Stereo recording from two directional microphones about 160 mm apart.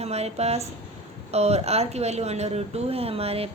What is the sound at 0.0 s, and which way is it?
Speech, 40° right (ahead or behind).